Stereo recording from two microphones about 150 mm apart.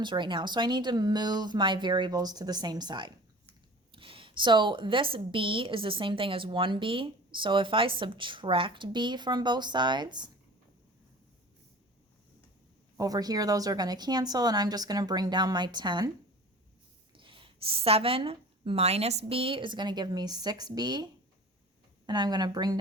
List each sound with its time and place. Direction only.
0.0 s a woman's voice: 30° right (ahead or behind)
13.0 s speech: 25° right (ahead or behind)
17.2 s a woman's voice: 35° right (ahead or behind)